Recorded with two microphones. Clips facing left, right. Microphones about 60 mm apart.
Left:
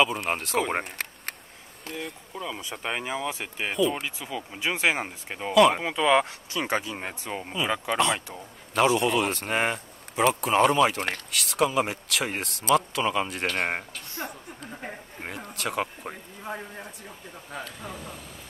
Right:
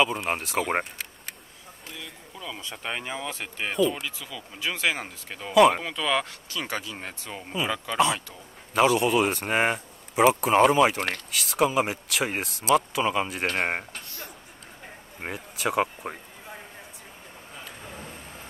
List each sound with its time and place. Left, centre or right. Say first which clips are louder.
0.0 s speech: even; centre
1.0 s a sound: left 5 dB; left
2.5 s speech: even; centre
3.9 s speech: left 3 dB; left
5.5 s speech: right 1 dB; centre
5.8 s speech: left 5 dB; centre
8.7 s speech: right 1 dB; centre
14.2 s a sound: left 6 dB; left
15.2 s speech: right 3 dB; centre